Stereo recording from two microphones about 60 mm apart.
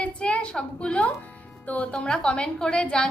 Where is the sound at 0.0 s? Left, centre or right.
Centre.